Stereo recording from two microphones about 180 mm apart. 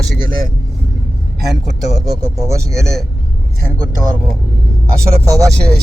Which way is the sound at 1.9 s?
20° right (ahead or behind).